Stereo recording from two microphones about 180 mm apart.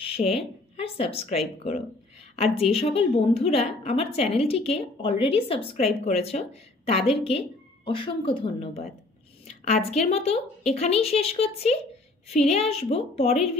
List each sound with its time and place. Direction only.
0.0 s a woman's voice: 35° left (ahead or behind)
2.3 s a woman's voice: 35° left (ahead or behind)